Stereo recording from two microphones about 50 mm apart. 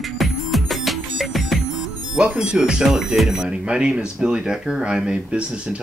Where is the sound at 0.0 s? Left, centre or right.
Centre.